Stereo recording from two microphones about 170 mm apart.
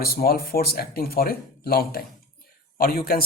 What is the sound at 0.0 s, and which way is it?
Speech, 60° left (ahead or behind).